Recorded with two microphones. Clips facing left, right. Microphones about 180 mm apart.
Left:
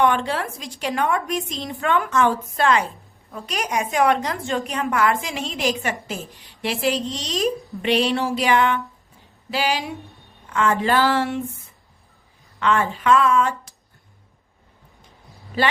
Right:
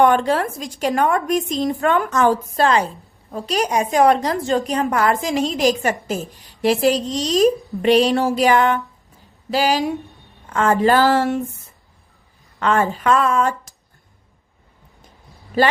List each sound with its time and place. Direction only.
0.0 s a woman's voice: 45° right (ahead or behind)
12.5 s a woman's voice: 40° right (ahead or behind)
15.6 s a woman's voice: 45° right (ahead or behind)